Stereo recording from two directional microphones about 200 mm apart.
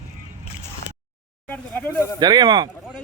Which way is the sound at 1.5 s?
10° left (ahead or behind).